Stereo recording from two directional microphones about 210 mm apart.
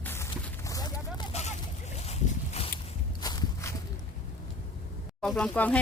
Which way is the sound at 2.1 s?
30° left (ahead or behind).